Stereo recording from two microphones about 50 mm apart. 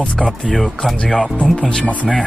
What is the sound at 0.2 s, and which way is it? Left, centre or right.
Speech, centre.